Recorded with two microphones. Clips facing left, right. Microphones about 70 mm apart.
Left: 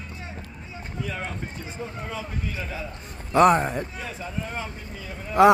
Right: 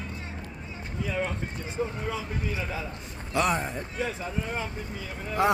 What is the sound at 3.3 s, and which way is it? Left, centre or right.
Speech, left.